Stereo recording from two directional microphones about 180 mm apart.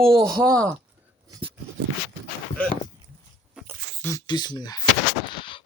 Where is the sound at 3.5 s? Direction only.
5° right (ahead or behind).